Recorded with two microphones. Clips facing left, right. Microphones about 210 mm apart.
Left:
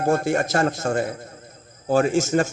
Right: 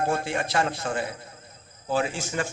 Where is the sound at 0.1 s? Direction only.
45° left (ahead or behind).